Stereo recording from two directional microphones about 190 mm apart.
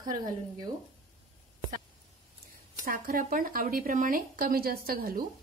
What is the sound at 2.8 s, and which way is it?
Speech, 50° right (ahead or behind).